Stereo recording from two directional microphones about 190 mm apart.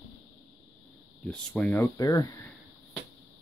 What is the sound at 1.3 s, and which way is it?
Speech, 10° left (ahead or behind).